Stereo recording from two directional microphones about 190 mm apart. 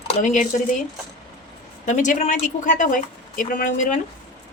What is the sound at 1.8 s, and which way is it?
Speech, 40° left (ahead or behind).